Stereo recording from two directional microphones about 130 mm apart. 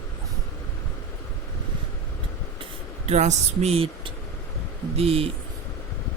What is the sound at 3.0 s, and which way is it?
Speech, 60° right (ahead or behind).